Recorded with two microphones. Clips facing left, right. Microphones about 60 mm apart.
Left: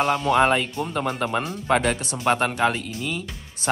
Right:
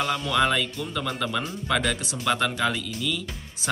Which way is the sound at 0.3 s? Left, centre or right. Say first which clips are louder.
Left 4 dB; left.